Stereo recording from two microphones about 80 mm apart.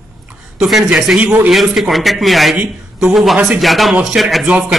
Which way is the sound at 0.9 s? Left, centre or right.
Centre.